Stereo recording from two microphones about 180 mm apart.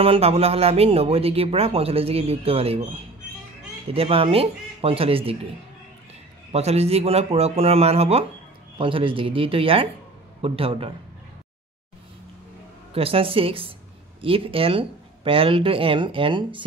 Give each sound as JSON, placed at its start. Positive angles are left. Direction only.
{"t": 0.0, "sound": "speech", "side_deg": -35}
{"t": 3.9, "sound": "speech", "side_deg": -30}
{"t": 6.5, "sound": "speech", "side_deg": -35}
{"t": 12.9, "sound": "speech", "side_deg": -30}